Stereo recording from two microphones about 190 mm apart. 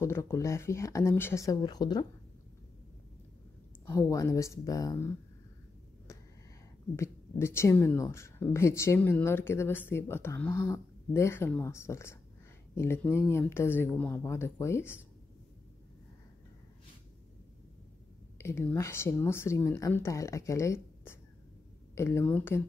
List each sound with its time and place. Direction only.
0.0 s speech: 15° left (ahead or behind)
3.9 s speech: 15° left (ahead or behind)
7.0 s speech: 15° left (ahead or behind)
18.4 s speech: 15° left (ahead or behind)